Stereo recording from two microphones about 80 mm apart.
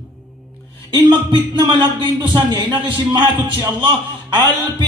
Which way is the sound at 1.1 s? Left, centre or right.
Right.